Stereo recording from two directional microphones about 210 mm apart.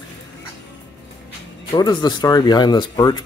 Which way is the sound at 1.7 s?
20° left (ahead or behind).